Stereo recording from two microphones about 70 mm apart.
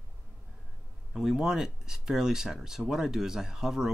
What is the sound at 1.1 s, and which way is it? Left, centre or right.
Speech, centre.